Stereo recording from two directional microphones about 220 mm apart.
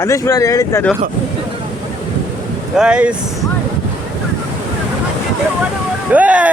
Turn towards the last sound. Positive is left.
turn(degrees=-5)  # may be behind; listen again after turning